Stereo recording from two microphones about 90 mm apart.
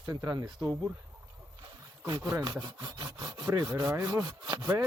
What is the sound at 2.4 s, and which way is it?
Speech, 45° right (ahead or behind).